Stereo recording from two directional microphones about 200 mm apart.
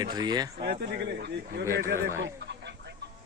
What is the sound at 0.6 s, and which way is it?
A man's voice, 55° right (ahead or behind).